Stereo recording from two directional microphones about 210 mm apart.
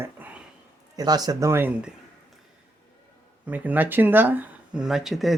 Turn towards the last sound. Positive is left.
turn(degrees=0)  # may be behind; listen again after turning